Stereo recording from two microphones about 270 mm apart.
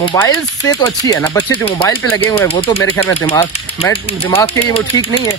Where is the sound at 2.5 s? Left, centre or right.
Left.